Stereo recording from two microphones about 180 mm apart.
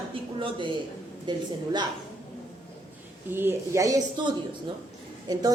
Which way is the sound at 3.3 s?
10° right (ahead or behind).